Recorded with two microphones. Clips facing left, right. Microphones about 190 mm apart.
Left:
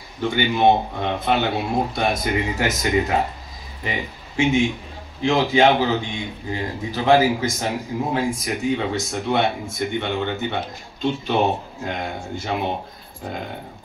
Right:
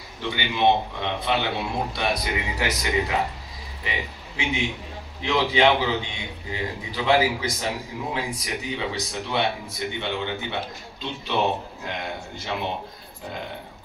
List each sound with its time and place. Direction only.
0.2 s speech: 45° left (ahead or behind)